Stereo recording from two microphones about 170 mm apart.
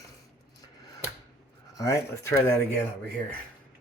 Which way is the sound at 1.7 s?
20° left (ahead or behind).